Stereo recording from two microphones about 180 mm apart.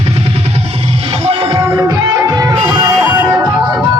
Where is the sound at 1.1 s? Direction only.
30° right (ahead or behind).